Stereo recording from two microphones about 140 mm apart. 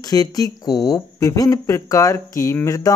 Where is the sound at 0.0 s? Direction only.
25° left (ahead or behind).